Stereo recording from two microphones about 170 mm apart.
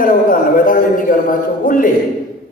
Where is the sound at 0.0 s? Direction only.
55° left (ahead or behind).